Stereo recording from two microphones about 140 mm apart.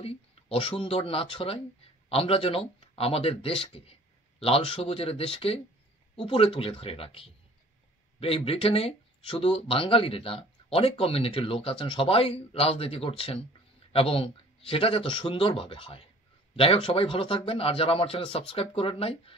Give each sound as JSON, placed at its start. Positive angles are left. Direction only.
{"t": 0.0, "sound": "a man's voice", "side_deg": 45}